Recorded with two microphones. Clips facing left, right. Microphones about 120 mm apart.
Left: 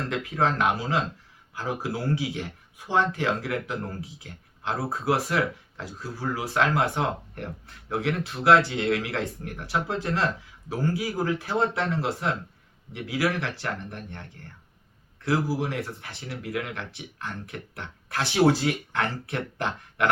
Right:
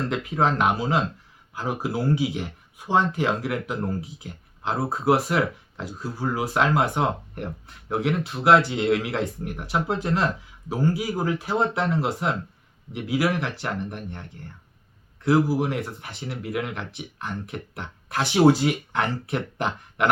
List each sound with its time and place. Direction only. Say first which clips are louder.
0.1 s speech: even; 20° right (ahead or behind)